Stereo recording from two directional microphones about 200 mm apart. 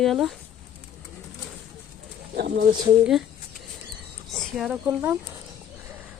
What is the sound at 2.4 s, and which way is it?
Speech, 55° right (ahead or behind).